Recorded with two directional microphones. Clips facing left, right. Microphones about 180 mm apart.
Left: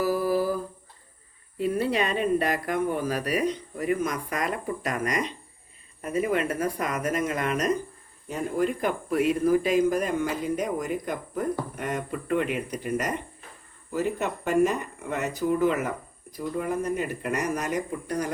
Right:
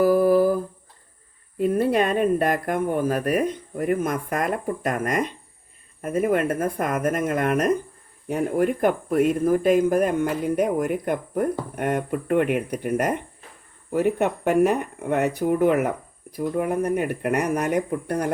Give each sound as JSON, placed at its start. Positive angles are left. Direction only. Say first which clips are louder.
{"t": 0.0, "sound": "humming", "louder": "right 7 dB", "side_deg": -55}
{"t": 1.5, "sound": "speech", "louder": "right 5 dB", "side_deg": -50}